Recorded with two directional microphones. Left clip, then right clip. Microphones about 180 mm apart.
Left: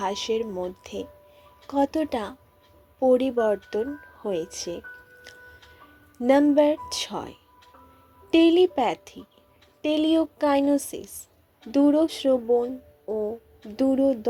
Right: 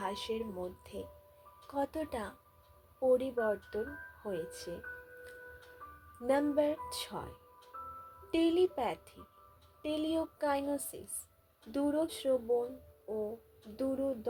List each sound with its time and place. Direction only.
0.0 s speech: 25° left (ahead or behind)
6.2 s speech: 25° left (ahead or behind)
13.1 s music: 20° left (ahead or behind)
13.7 s speech: 25° left (ahead or behind)